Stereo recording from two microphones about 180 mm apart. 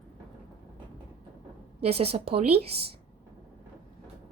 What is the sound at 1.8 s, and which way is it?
Speech, 35° right (ahead or behind).